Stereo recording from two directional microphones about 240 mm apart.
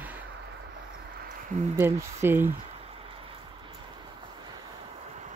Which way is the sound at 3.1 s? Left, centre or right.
Right.